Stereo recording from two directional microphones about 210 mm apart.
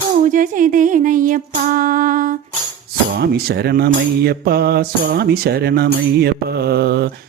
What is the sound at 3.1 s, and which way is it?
Speech, 50° right (ahead or behind).